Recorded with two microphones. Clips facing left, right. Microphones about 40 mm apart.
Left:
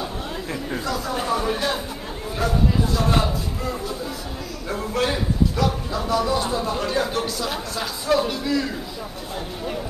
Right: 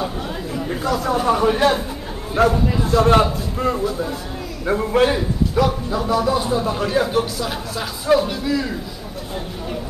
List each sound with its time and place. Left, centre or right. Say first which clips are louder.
1.2 s speech: right 6 dB; right
2.4 s speech: right 9 dB; right
2.8 s a man's voice: right 7 dB; right
4.6 s a man's voice: right 7 dB; centre